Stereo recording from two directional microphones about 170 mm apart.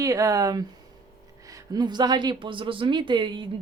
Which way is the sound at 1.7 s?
25° right (ahead or behind).